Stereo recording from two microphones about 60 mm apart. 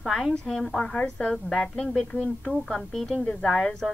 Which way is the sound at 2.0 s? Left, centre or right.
Centre.